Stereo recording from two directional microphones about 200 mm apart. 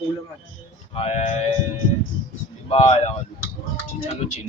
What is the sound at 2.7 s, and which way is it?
Speech, 30° left (ahead or behind).